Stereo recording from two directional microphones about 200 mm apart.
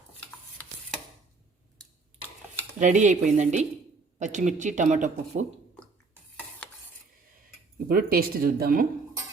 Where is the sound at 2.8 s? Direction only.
40° right (ahead or behind).